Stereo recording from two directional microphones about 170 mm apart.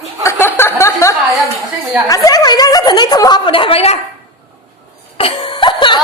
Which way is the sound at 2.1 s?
20° left (ahead or behind).